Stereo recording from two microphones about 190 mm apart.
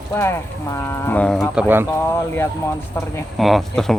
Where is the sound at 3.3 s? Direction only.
Centre (ahead or behind).